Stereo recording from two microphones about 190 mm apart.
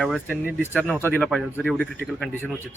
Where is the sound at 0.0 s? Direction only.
5° left (ahead or behind).